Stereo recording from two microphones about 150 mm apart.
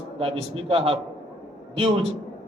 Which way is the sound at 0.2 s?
40° right (ahead or behind).